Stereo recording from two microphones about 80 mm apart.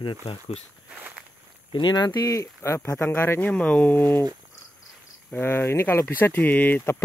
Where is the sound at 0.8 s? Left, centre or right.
Centre.